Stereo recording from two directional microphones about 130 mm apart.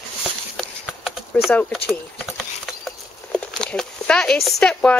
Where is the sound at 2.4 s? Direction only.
Centre (ahead or behind).